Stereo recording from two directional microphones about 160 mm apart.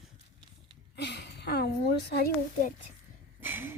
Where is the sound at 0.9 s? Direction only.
90° left.